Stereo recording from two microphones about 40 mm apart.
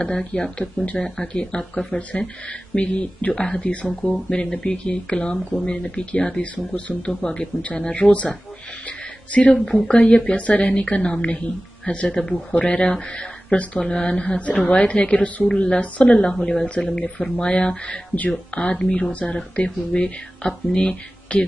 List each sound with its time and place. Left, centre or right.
0.0 s speech: left
3.6 s speech: left
6.4 s speech: left
8.8 s music: left
9.8 s speech: left
10.6 s speech: left
13.1 s a sound: left
13.7 s speech: centre